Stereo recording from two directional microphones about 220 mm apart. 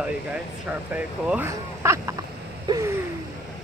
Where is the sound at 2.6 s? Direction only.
15° right (ahead or behind).